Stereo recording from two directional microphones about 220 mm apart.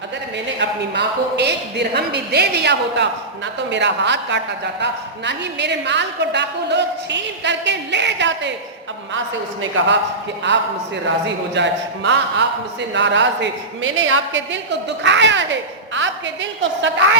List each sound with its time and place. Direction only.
0.6 s a woman's voice: 50° right (ahead or behind)